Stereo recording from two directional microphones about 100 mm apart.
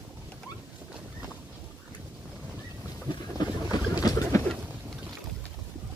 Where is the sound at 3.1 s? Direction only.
45° left (ahead or behind).